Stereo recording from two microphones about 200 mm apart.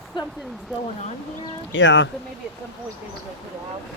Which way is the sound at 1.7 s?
65° left (ahead or behind).